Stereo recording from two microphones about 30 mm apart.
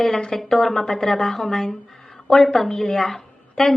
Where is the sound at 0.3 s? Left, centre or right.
Centre.